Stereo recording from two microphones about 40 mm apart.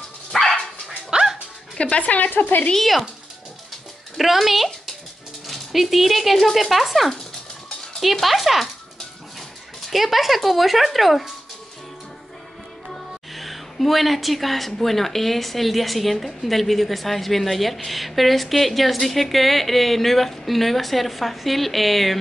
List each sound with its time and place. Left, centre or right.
0.3 s dog: centre
1.8 s speech: left
2.3 s speech: left
2.7 s a woman's voice: centre
4.2 s a woman's voice: centre
9.8 s a woman's voice: centre
13.3 s a woman's voice: centre